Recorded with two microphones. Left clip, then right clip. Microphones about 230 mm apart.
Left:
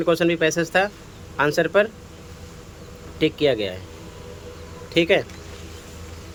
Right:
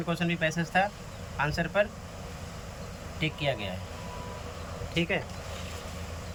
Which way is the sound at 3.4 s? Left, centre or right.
Left.